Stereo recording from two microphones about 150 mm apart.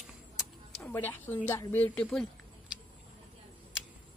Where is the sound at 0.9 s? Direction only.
10° left (ahead or behind).